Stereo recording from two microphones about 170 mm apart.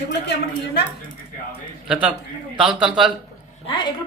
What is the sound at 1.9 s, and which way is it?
Speech, 5° right (ahead or behind).